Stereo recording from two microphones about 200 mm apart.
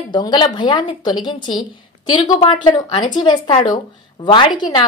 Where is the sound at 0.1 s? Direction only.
20° left (ahead or behind).